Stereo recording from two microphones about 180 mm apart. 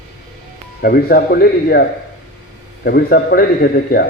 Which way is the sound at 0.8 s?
55° left (ahead or behind).